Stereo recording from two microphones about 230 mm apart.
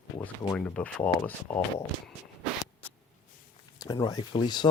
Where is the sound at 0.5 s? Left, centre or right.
Centre.